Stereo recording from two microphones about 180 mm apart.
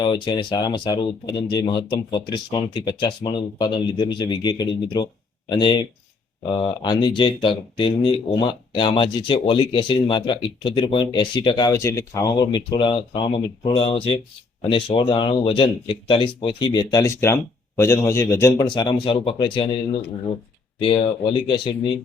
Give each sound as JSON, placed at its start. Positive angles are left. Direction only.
{"t": 0.0, "sound": "speech", "side_deg": 25}